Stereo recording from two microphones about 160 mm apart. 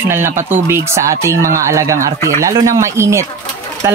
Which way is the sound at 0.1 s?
15° right (ahead or behind).